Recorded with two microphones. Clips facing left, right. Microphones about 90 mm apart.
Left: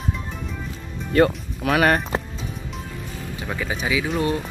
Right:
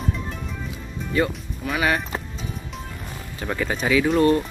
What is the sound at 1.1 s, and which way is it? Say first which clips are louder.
Speech: left 5 dB; 55° left (ahead or behind).